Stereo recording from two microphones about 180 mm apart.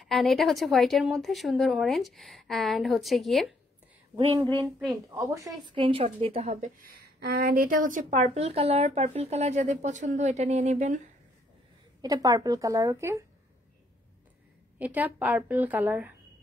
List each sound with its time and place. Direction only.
0.0 s speech: centre (ahead or behind)
5.1 s a woman's voice: 20° right (ahead or behind); by 6.9 s 40° right (ahead or behind)
7.2 s speech: 60° right (ahead or behind); by 11.0 s 40° right (ahead or behind)
12.0 s a woman's voice: 20° right (ahead or behind)
14.8 s a woman's voice: 10° right (ahead or behind)